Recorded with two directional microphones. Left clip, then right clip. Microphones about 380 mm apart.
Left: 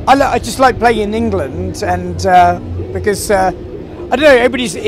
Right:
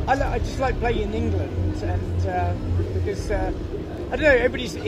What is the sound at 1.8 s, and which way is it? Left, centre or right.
Speech, left.